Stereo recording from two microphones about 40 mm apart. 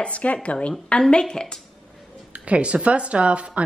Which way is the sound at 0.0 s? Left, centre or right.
Left.